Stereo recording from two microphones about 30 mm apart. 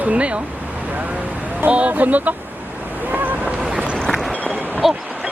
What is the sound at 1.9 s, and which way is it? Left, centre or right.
Speech, right.